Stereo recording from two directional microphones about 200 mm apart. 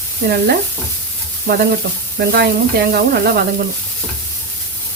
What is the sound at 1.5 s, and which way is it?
Sizzle, 50° right (ahead or behind).